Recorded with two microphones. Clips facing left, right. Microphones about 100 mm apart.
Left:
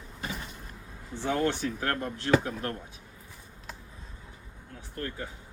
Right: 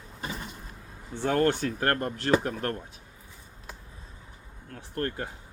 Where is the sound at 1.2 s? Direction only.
55° right (ahead or behind).